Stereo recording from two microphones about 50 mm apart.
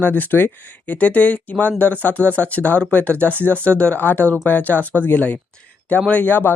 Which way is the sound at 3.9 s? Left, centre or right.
Left.